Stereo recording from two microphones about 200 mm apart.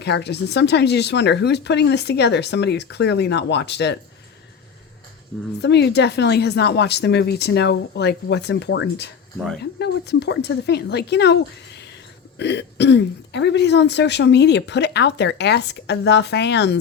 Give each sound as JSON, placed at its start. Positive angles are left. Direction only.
{"t": 0.0, "sound": "speech", "side_deg": 55}
{"t": 5.6, "sound": "speech", "side_deg": 55}